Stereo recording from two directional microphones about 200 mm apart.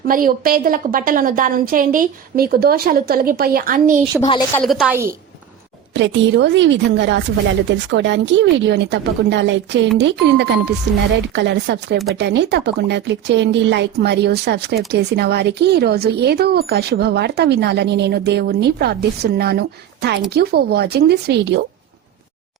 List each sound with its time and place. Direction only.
0.1 s a woman's voice: 45° right (ahead or behind)
4.2 s speech: 25° left (ahead or behind)
4.5 s a woman's voice: centre (ahead or behind)
5.9 s a woman's voice: 65° right (ahead or behind)